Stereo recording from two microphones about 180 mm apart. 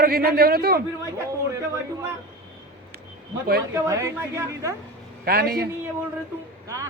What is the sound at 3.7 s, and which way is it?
A woman's voice, 15° right (ahead or behind).